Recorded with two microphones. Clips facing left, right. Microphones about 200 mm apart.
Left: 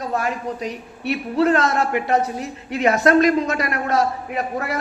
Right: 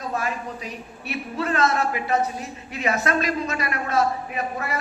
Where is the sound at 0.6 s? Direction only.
75° left (ahead or behind).